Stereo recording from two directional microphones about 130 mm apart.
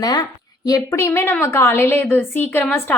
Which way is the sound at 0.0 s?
30° left (ahead or behind).